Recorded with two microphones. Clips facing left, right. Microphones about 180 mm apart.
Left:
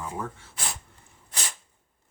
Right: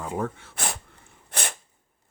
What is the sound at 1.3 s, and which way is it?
Sneeze, 60° right (ahead or behind).